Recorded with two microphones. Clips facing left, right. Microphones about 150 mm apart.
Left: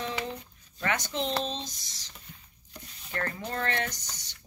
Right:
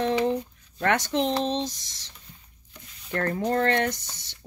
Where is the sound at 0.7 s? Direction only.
65° right (ahead or behind).